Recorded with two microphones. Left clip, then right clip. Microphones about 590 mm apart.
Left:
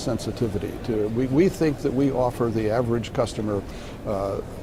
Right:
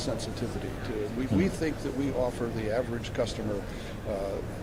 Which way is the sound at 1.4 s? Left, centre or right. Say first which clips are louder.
Left 9 dB; left.